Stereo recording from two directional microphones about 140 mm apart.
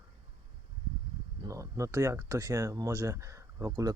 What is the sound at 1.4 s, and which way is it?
Speech, 25° right (ahead or behind).